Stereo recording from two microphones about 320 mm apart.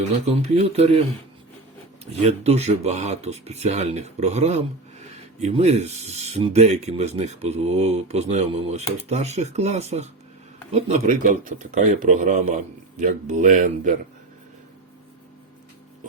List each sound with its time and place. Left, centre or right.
0.3 s speech: centre
2.2 s speech: centre